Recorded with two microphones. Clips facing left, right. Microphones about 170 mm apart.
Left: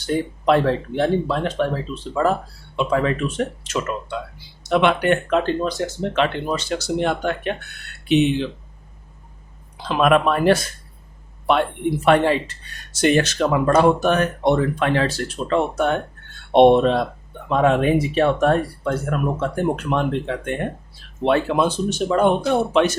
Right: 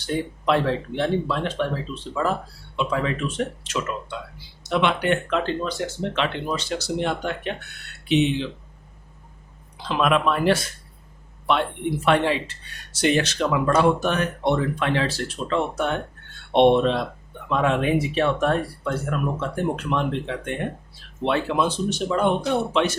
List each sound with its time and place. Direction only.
0.0 s speech: 45° left (ahead or behind)
9.9 s speech: 50° left (ahead or behind)
12.0 s speech: 45° left (ahead or behind)